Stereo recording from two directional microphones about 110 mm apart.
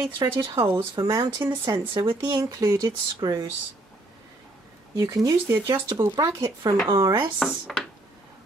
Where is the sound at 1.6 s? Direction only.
50° right (ahead or behind).